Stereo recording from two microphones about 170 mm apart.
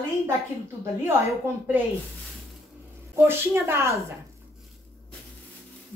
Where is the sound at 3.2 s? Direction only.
15° right (ahead or behind).